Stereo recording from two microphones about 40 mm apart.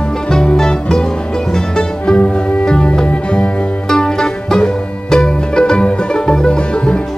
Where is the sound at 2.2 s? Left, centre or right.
Left.